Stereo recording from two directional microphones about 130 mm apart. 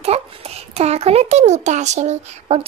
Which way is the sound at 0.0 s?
50° right (ahead or behind).